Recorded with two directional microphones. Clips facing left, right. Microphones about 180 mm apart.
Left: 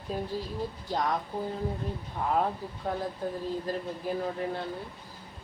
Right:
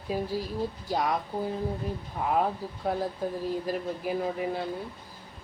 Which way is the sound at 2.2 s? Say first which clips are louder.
Right 1 dB; 5° right (ahead or behind).